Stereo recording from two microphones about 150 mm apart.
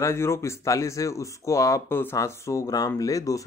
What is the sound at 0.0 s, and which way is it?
Speech, 20° left (ahead or behind).